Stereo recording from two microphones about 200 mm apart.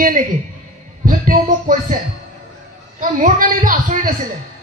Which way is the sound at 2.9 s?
40° right (ahead or behind).